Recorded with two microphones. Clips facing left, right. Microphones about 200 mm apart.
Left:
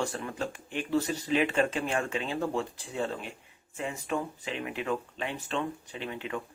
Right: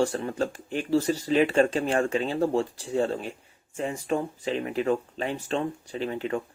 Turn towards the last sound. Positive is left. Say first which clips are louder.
# right 7 dB
turn(degrees=-40)  # may be behind; listen again after turning